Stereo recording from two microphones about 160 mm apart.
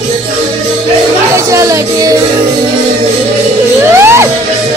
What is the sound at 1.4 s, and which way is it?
Speech, 20° right (ahead or behind).